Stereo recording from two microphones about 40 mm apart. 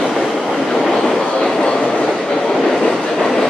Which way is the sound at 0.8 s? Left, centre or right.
Centre.